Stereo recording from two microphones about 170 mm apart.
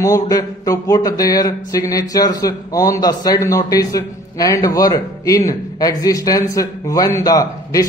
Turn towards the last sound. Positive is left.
turn(degrees=20)  # may be behind; listen again after turning